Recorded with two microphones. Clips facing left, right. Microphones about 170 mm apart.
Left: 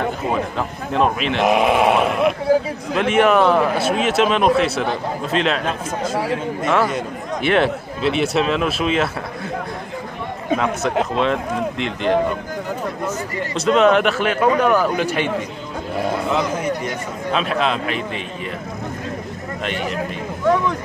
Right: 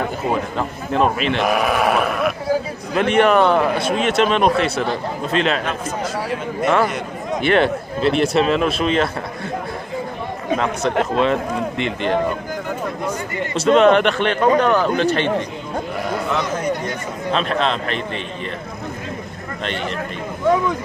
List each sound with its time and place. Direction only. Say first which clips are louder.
0.3 s a man's voice: even; centre (ahead or behind)
1.4 s speech: left 4 dB; 25° left (ahead or behind)
3.0 s a man's voice: right 1 dB; 5° left (ahead or behind)
7.4 s a man's voice: right 1 dB; centre (ahead or behind)
10.6 s a man's voice: right 1 dB; 5° left (ahead or behind)
13.6 s a man's voice: right 2 dB; centre (ahead or behind)
19.6 s speech: even; 5° left (ahead or behind)